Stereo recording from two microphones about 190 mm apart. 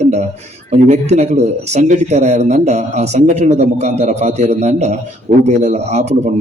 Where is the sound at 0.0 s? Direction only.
35° right (ahead or behind).